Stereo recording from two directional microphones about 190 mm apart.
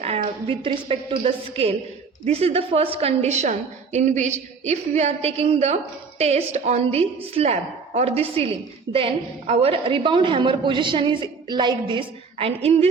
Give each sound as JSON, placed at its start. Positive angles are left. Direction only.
{"t": 0.4, "sound": "a woman's voice", "side_deg": -25}